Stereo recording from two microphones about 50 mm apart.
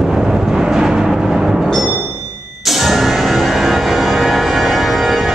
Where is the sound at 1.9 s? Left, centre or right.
Right.